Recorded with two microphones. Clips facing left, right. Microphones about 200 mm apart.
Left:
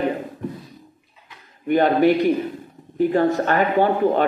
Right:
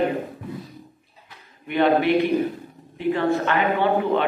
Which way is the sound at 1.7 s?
40° left (ahead or behind).